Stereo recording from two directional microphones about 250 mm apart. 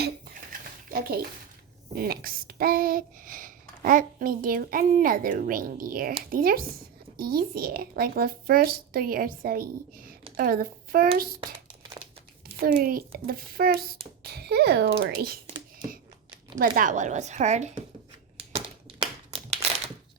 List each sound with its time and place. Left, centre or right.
0.9 s a child's voice: right
12.5 s a child's voice: right
16.6 s speech: right
18.3 s crumpling: right